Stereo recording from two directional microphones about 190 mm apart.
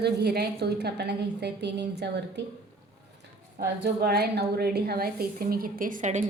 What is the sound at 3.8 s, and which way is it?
A woman's voice, 55° right (ahead or behind).